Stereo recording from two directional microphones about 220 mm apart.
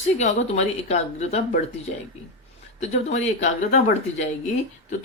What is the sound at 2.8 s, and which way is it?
Speech, 30° left (ahead or behind).